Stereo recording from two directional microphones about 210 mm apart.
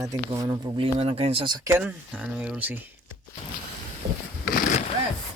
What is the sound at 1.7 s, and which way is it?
Speech, 10° right (ahead or behind).